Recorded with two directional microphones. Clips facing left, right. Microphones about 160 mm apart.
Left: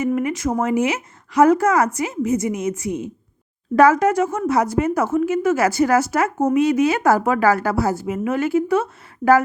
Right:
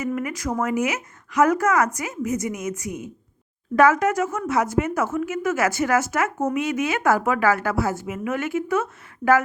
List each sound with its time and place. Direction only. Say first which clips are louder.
0.0 s speech: left 6 dB; 25° left (ahead or behind)